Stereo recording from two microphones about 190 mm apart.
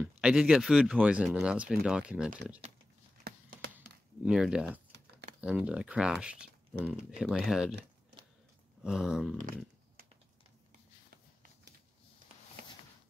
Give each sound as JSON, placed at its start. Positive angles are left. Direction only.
{"t": 0.0, "sound": "speech", "side_deg": -5}
{"t": 3.3, "sound": "tap", "side_deg": -55}
{"t": 4.2, "sound": "speech", "side_deg": -5}
{"t": 8.8, "sound": "speech", "side_deg": -5}